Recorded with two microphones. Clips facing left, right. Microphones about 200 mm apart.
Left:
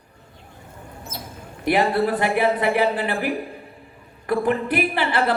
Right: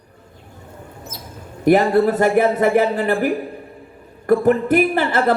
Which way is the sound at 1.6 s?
45° right (ahead or behind).